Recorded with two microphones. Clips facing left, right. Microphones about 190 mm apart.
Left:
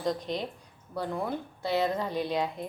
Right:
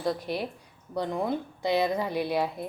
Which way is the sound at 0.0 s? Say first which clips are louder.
Right 1 dB; 5° right (ahead or behind).